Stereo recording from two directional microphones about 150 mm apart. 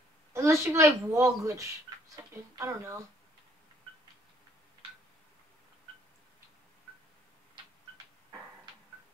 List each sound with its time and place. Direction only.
0.3 s a child's voice: 20° right (ahead or behind)